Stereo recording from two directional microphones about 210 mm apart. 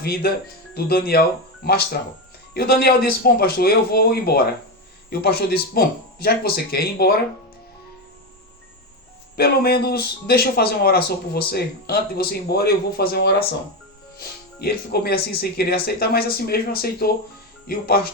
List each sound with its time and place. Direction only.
0.0 s a man's voice: 45° left (ahead or behind)
9.3 s a man's voice: 45° left (ahead or behind)